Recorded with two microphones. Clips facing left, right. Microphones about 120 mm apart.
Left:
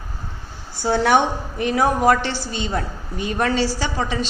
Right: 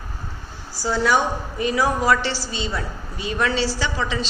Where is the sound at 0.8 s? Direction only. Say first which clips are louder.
Left 3 dB; 65° left (ahead or behind).